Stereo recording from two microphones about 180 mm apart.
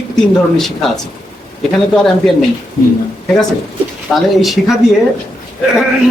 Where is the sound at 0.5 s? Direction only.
Centre (ahead or behind).